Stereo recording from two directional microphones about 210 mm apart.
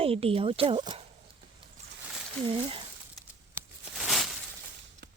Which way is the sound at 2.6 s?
25° right (ahead or behind).